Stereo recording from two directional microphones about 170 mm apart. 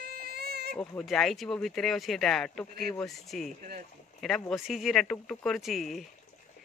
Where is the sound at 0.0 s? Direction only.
65° right (ahead or behind).